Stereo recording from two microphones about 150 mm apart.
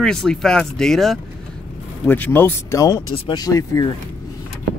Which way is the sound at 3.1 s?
40° left (ahead or behind).